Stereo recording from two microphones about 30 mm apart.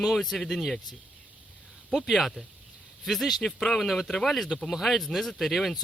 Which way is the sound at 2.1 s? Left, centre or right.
Centre.